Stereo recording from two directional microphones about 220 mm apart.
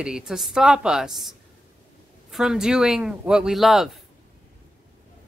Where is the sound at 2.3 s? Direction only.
Centre (ahead or behind).